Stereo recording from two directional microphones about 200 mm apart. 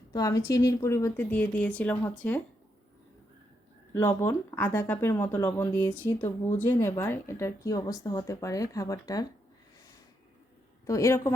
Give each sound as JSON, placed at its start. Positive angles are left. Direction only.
{"t": 0.1, "sound": "speech", "side_deg": 20}
{"t": 3.9, "sound": "speech", "side_deg": 10}
{"t": 10.8, "sound": "speech", "side_deg": 15}